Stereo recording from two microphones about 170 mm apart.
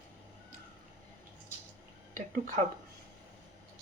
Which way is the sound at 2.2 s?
50° right (ahead or behind).